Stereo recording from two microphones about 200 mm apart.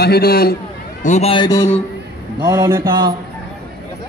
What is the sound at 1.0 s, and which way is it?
Speech, 35° left (ahead or behind).